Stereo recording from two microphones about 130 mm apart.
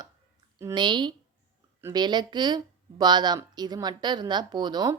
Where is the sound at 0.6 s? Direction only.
35° right (ahead or behind).